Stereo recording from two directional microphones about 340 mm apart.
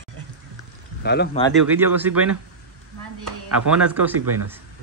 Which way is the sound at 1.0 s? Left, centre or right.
Left.